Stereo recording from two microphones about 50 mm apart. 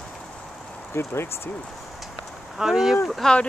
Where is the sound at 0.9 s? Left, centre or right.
Left.